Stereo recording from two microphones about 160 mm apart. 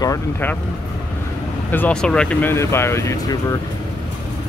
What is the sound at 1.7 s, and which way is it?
Speech, 10° left (ahead or behind).